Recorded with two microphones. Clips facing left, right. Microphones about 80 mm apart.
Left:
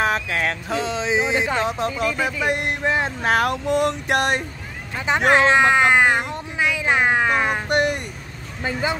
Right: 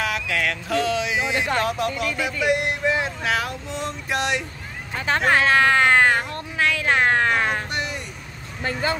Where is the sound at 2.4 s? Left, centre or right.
Left.